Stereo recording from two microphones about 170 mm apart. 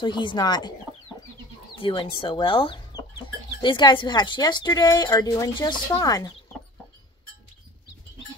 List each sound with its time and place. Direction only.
0.0 s a woman's voice: 30° left (ahead or behind)
1.8 s a woman's voice: 30° left (ahead or behind)